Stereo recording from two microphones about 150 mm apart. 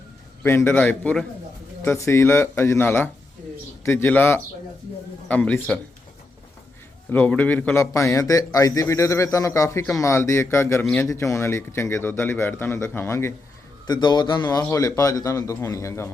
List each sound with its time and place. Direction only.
0.4 s speech: 15° left (ahead or behind)
7.1 s a man's voice: 10° left (ahead or behind)
13.8 s a man's voice: 30° left (ahead or behind)